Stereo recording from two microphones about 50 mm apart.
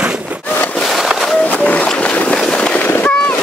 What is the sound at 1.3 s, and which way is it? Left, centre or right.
Music, left.